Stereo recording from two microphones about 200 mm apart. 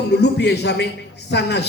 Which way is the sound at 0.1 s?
55° left (ahead or behind).